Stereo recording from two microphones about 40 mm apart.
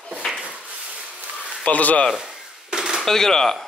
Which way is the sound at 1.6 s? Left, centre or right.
Left.